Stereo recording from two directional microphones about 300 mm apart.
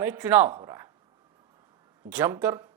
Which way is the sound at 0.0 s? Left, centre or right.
Centre.